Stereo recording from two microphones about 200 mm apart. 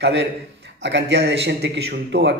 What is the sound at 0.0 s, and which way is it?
A man's voice, 60° right (ahead or behind).